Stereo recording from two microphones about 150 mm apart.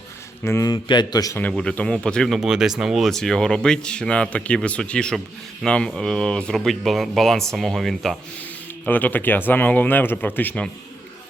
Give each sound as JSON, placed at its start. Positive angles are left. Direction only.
{"t": 0.4, "sound": "a man's voice", "side_deg": 20}
{"t": 1.4, "sound": "speech", "side_deg": 5}
{"t": 8.8, "sound": "speech", "side_deg": 10}